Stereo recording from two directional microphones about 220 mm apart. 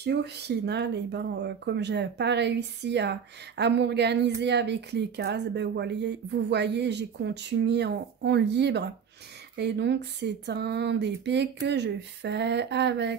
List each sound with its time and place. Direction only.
0.0 s speech: 50° right (ahead or behind)